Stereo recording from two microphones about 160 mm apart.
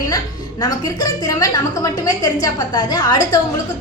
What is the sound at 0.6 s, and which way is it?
A woman's voice, 25° left (ahead or behind).